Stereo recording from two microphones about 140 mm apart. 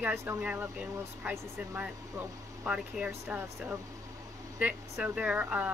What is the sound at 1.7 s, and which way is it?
Speech, 10° right (ahead or behind).